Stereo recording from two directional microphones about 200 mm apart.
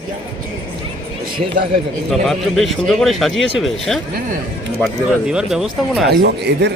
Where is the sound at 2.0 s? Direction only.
Centre (ahead or behind).